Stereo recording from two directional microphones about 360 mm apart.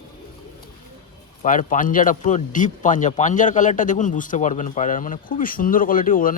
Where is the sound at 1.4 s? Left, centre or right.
Left.